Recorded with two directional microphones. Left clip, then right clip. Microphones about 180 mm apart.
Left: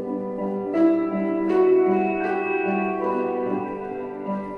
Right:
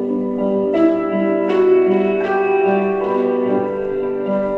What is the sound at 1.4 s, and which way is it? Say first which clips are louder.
Music: right 3 dB; 55° left (ahead or behind).